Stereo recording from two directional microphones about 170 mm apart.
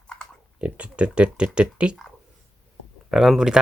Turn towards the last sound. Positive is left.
turn(degrees=-5)  # may be behind; listen again after turning